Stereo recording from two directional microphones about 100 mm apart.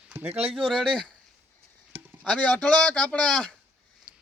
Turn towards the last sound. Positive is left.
turn(degrees=10)  # may be behind; listen again after turning